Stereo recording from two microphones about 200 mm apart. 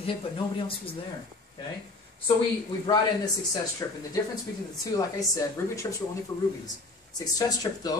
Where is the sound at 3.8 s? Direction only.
15° left (ahead or behind).